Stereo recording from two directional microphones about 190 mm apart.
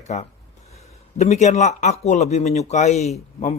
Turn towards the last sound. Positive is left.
turn(degrees=35)  # may be behind; listen again after turning